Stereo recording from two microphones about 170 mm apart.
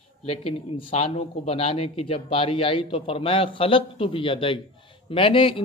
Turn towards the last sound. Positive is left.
turn(degrees=30)  # may be behind; listen again after turning